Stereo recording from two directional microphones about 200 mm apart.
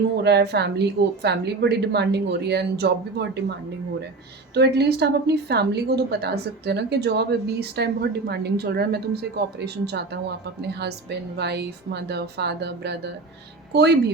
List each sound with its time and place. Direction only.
0.2 s a woman's voice: 55° right (ahead or behind)
4.5 s a woman's voice: 55° right (ahead or behind)